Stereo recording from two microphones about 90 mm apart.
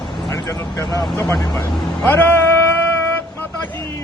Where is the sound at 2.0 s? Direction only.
20° left (ahead or behind).